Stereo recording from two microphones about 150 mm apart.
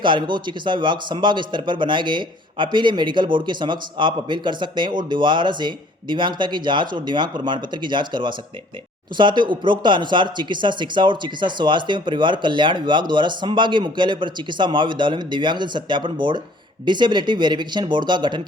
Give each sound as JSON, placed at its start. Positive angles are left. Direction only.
{"t": 0.0, "sound": "speech", "side_deg": -30}